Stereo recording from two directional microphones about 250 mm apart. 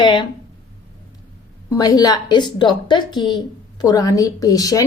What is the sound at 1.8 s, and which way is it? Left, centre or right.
A woman's voice, centre.